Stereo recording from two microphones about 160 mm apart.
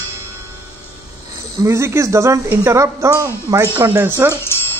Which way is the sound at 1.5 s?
20° right (ahead or behind).